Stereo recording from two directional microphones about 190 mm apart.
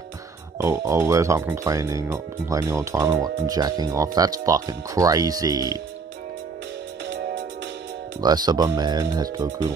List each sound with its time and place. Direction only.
0.6 s speech: 15° right (ahead or behind)
8.2 s speech: 20° right (ahead or behind)